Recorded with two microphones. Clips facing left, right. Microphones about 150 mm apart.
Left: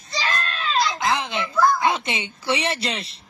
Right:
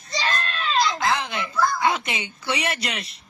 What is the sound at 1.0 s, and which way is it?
Speech, 20° left (ahead or behind).